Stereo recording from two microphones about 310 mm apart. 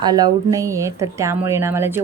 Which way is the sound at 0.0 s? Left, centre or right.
Centre.